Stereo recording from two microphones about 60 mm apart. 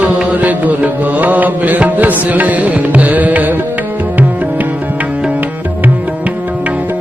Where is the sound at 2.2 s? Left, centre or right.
Right.